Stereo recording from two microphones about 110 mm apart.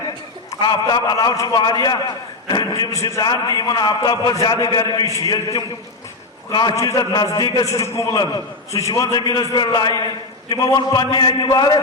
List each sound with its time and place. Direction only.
0.6 s a man's voice: 45° left (ahead or behind)
3.2 s a man's voice: 40° left (ahead or behind)
7.7 s a man's voice: 25° left (ahead or behind)